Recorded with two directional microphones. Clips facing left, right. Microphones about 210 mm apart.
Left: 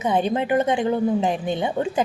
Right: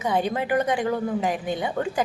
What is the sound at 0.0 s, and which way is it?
A woman's voice, 25° left (ahead or behind).